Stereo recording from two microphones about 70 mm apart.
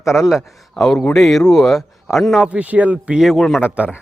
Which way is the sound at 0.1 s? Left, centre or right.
Centre.